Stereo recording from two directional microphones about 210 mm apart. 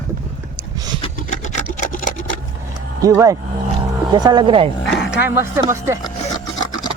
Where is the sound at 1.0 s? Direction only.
35° left (ahead or behind).